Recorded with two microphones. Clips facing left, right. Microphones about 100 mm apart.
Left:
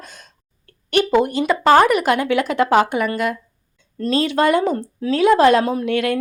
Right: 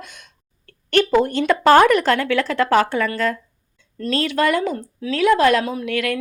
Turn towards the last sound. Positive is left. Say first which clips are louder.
# left 4 dB
turn(degrees=25)  # may be behind; listen again after turning